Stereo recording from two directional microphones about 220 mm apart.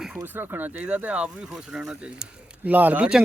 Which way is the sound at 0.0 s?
5° right (ahead or behind).